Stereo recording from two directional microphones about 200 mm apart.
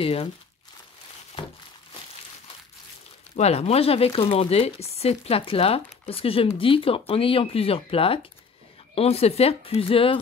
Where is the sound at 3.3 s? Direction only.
30° left (ahead or behind).